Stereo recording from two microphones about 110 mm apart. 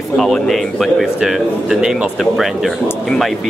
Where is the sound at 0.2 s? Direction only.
5° left (ahead or behind).